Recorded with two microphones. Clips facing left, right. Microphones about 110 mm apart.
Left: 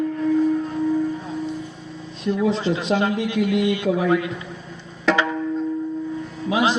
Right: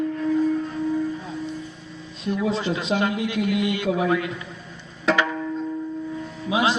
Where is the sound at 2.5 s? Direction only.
25° left (ahead or behind).